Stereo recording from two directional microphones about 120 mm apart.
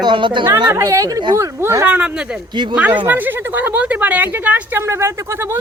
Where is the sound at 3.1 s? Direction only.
15° right (ahead or behind).